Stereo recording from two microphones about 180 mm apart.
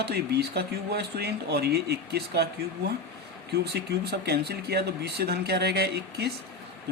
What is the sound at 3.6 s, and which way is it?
Speech, 65° right (ahead or behind).